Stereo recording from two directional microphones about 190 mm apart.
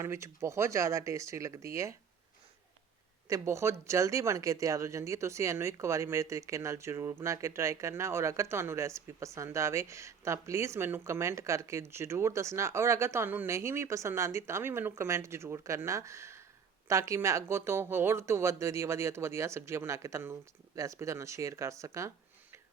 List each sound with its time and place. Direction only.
0.0 s speech: 15° right (ahead or behind)
3.2 s speech: 15° right (ahead or behind)